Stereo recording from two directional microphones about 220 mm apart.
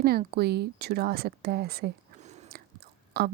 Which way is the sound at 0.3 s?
45° right (ahead or behind).